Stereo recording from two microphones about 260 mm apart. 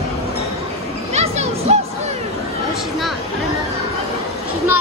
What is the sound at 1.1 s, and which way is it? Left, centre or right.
Music, right.